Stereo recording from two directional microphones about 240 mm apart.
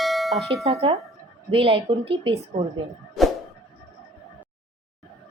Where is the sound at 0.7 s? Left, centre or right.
Right.